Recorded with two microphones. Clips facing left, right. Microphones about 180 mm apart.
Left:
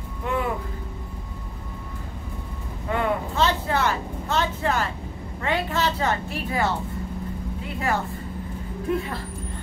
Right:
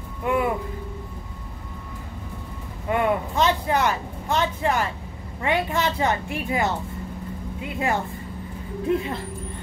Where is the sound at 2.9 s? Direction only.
15° right (ahead or behind).